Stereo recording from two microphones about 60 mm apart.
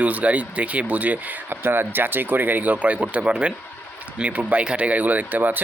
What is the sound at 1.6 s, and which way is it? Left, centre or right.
Speech, right.